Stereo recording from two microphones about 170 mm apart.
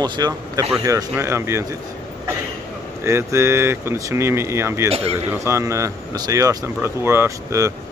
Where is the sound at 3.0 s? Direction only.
15° right (ahead or behind).